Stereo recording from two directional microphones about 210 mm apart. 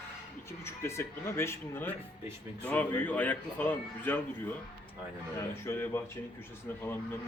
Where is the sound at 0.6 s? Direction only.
10° left (ahead or behind).